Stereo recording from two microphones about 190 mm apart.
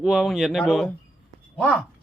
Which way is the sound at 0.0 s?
Centre (ahead or behind).